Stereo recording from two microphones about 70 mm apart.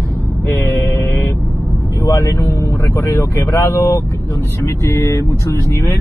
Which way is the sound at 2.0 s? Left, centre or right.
Left.